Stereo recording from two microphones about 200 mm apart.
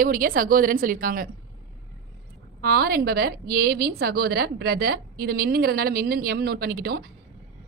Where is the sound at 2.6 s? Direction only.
50° right (ahead or behind).